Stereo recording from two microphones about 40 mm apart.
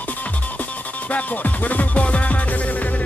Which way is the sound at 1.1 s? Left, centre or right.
Left.